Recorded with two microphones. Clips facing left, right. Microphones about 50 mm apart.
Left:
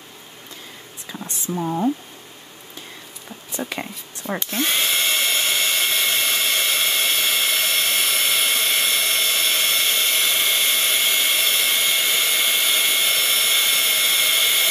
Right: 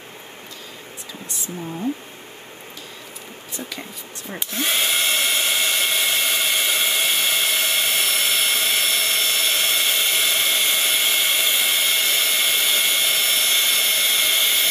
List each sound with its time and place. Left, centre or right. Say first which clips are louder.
1.6 s speech: left 7 dB; left
3.5 s speech: left 5 dB; left
4.5 s drill: right 1 dB; centre